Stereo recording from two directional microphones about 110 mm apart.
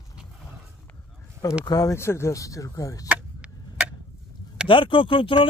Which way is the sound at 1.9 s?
25° left (ahead or behind).